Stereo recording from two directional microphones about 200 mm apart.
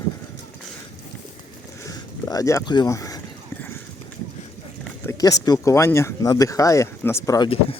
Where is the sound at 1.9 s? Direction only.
15° left (ahead or behind).